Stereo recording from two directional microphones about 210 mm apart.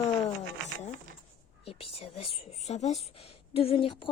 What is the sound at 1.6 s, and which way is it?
Speech, 25° left (ahead or behind).